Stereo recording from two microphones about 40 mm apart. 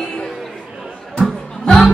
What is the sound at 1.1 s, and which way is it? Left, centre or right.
Music, centre.